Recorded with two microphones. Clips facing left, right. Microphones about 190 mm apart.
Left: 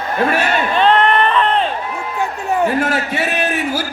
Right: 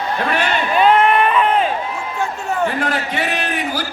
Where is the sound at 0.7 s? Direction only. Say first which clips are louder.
Right 1 dB; 10° right (ahead or behind).